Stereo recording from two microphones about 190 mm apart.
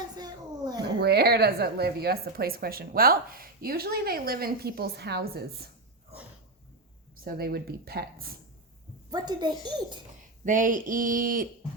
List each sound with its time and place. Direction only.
0.2 s a sound: 20° right (ahead or behind)
1.0 s a woman's voice: 60° right (ahead or behind)
7.3 s speech: 55° right (ahead or behind)
9.0 s a child's voice: 20° right (ahead or behind)
10.4 s speech: 45° right (ahead or behind)